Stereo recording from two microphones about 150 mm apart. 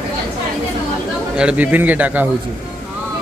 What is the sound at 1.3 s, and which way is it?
Speech, 10° right (ahead or behind).